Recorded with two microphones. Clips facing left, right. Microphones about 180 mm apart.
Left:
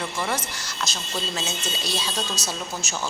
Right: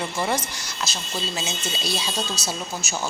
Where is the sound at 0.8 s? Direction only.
5° right (ahead or behind).